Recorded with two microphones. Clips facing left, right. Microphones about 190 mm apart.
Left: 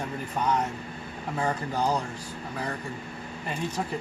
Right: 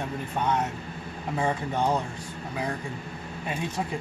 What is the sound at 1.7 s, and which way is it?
Speech, 25° right (ahead or behind).